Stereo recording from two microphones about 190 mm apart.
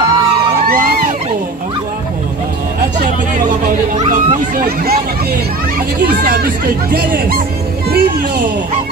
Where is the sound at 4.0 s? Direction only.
40° right (ahead or behind).